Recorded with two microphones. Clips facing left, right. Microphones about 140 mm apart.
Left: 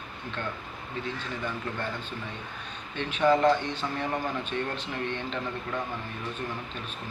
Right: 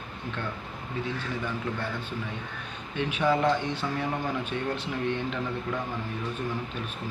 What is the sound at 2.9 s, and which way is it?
Speech, 10° right (ahead or behind).